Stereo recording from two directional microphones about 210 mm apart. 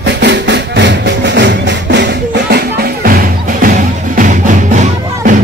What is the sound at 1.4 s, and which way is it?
Music, 55° right (ahead or behind).